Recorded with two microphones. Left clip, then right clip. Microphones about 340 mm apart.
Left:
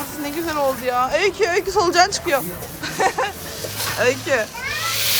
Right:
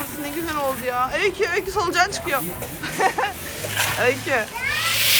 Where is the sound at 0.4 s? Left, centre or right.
Centre.